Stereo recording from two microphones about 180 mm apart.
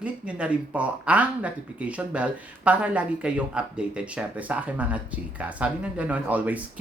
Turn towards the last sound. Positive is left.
turn(degrees=-10)  # may be behind; listen again after turning